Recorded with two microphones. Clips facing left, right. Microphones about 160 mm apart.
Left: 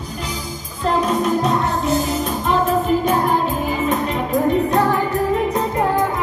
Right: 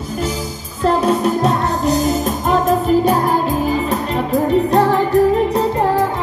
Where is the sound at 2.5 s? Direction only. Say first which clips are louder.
Right 3 dB; 40° right (ahead or behind).